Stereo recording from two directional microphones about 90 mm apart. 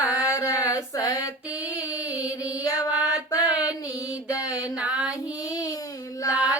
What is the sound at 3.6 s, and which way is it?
Music, 40° left (ahead or behind).